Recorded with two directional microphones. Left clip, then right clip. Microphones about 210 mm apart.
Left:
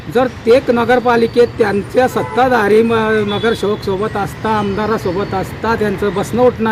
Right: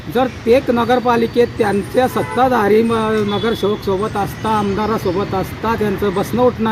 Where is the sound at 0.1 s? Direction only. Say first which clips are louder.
Left 3 dB; centre (ahead or behind).